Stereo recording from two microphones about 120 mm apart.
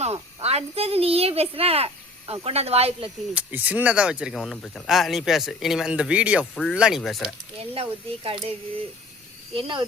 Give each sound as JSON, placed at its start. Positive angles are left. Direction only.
{"t": 0.4, "sound": "speech", "side_deg": -60}
{"t": 3.3, "sound": "speech", "side_deg": -10}
{"t": 4.4, "sound": "speech", "side_deg": 5}
{"t": 6.5, "sound": "speech", "side_deg": 5}
{"t": 6.7, "sound": "speech", "side_deg": -5}
{"t": 7.6, "sound": "speech", "side_deg": -50}
{"t": 9.6, "sound": "speech", "side_deg": -45}